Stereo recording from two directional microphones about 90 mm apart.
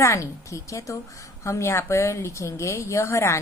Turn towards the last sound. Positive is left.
turn(degrees=30)  # may be behind; listen again after turning